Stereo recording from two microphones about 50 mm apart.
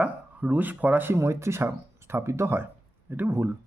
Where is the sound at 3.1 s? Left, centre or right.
Right.